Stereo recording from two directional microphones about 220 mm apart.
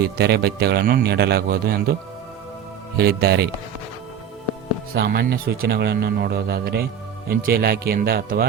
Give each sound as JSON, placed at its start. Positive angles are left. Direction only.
{"t": 0.0, "sound": "a man's voice", "side_deg": -50}
{"t": 3.0, "sound": "a man's voice", "side_deg": -45}
{"t": 4.9, "sound": "a man's voice", "side_deg": -45}